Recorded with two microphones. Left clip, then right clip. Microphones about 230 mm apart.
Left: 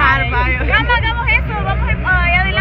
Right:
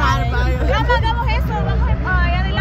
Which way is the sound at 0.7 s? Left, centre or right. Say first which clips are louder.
Left 3 dB; centre.